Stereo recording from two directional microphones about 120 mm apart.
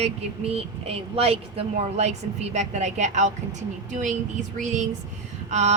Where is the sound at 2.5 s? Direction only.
75° right (ahead or behind).